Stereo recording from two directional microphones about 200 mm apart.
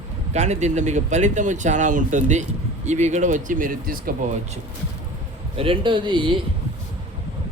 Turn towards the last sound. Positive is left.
turn(degrees=-25)  # may be behind; listen again after turning